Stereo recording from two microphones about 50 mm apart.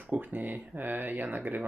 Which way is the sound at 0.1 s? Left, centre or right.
Right.